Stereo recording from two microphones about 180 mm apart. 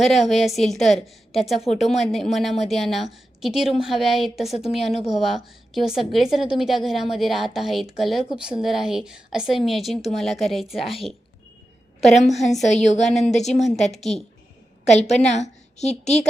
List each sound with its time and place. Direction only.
0.0 s a woman's voice: centre (ahead or behind)
12.0 s a woman's voice: centre (ahead or behind)
12.6 s a woman's voice: 40° left (ahead or behind)
14.8 s a woman's voice: 40° left (ahead or behind)